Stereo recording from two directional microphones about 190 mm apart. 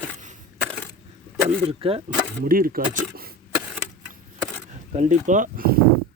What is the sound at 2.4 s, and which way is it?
Speech, 50° right (ahead or behind).